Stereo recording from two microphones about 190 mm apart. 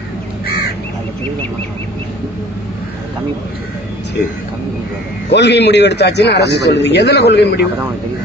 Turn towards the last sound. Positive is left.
turn(degrees=60)  # may be behind; listen again after turning